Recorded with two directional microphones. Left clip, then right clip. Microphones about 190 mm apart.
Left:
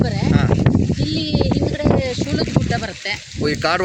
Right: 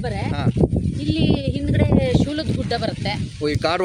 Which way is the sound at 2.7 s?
60° right (ahead or behind).